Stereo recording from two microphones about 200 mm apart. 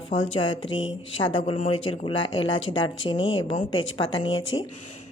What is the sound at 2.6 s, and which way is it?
Speech, 75° left (ahead or behind).